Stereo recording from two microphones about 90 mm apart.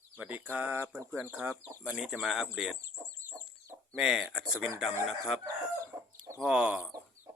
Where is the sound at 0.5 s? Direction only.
20° right (ahead or behind).